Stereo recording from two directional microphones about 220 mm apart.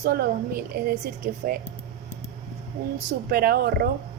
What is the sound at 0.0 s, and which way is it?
Speech, 45° right (ahead or behind).